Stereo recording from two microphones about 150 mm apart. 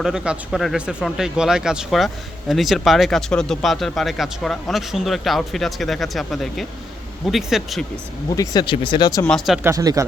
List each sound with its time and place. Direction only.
0.0 s speech: 5° right (ahead or behind)
8.4 s speech: 30° left (ahead or behind)
9.2 s speech: 5° left (ahead or behind)
9.6 s speech: 25° right (ahead or behind)